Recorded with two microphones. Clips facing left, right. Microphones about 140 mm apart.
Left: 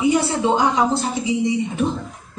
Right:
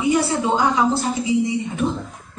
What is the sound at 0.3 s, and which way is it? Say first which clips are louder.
A woman's voice: left 1 dB; 20° left (ahead or behind).